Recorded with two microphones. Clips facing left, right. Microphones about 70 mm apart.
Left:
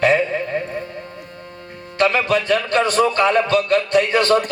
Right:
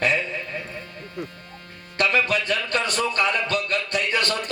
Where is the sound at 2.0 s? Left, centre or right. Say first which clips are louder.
Left 5 dB; left.